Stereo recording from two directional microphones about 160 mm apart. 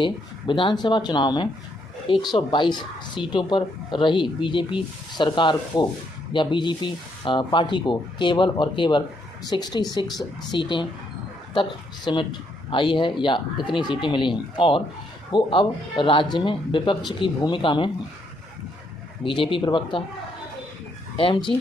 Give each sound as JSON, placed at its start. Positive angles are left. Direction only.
{"t": 0.0, "sound": "a woman's voice", "side_deg": 30}
{"t": 19.2, "sound": "speech", "side_deg": 30}
{"t": 21.2, "sound": "speech", "side_deg": 30}